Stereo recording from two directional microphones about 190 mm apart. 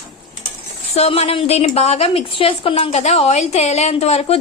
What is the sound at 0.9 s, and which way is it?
A woman's voice, 35° left (ahead or behind).